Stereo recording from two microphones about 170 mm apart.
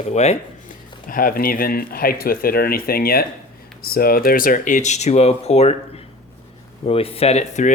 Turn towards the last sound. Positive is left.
turn(degrees=40)  # may be behind; listen again after turning